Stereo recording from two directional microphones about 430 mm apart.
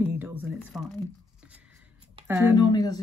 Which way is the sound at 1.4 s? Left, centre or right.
Centre.